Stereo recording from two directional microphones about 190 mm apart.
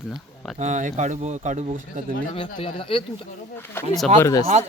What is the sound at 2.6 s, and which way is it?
Speech, 30° left (ahead or behind).